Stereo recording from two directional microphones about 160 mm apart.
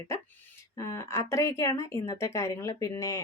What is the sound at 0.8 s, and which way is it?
Speech, 15° left (ahead or behind).